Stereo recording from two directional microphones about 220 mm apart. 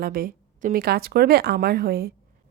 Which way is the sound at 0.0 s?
40° right (ahead or behind).